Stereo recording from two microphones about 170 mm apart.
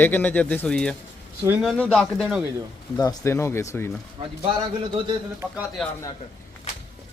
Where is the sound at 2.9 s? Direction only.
20° left (ahead or behind).